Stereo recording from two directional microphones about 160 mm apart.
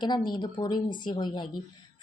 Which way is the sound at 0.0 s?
25° left (ahead or behind).